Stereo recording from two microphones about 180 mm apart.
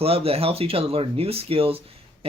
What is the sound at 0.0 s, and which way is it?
Speech, 35° right (ahead or behind).